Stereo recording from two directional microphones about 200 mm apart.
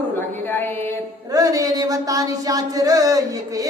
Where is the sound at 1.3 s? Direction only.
20° right (ahead or behind).